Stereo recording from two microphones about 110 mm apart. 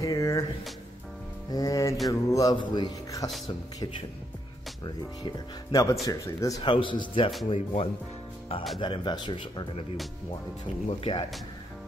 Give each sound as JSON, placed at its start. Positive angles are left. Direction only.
{"t": 0.0, "sound": "a sound", "side_deg": 30}
{"t": 1.5, "sound": "speech", "side_deg": 35}
{"t": 2.5, "sound": "speech", "side_deg": 45}
{"t": 5.2, "sound": "speech", "side_deg": 35}
{"t": 6.6, "sound": "speech", "side_deg": 50}
{"t": 7.5, "sound": "speech", "side_deg": 65}
{"t": 8.7, "sound": "speech", "side_deg": 45}
{"t": 10.9, "sound": "speech", "side_deg": 50}